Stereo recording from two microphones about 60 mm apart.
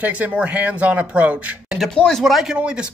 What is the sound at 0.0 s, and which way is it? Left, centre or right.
Speech, right.